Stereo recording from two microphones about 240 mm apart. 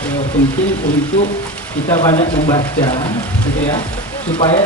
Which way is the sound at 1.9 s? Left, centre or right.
Centre.